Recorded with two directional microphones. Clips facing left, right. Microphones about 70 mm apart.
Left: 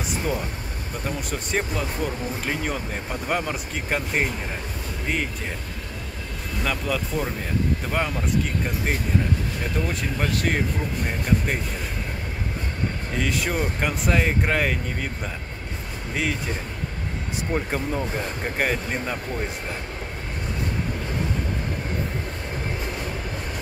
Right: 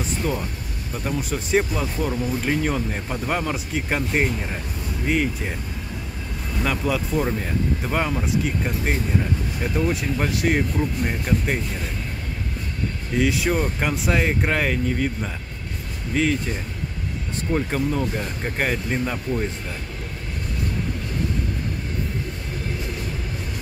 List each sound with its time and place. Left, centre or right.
1.0 s speech: centre
6.6 s speech: centre
13.2 s speech: centre
16.1 s speech: centre
17.5 s speech: centre